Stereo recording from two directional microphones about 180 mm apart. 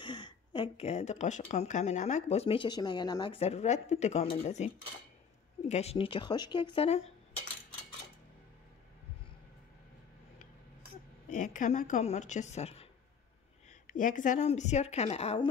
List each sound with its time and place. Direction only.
0.0 s speech: 25° left (ahead or behind)
11.2 s speech: 45° left (ahead or behind)
13.8 s speech: 45° left (ahead or behind)